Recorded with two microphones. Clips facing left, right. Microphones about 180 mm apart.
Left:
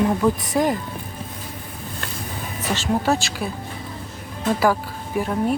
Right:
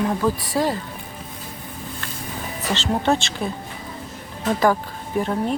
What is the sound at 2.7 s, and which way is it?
Speech, 10° left (ahead or behind).